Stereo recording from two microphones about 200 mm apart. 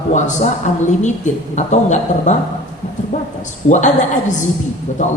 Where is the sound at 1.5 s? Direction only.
35° left (ahead or behind).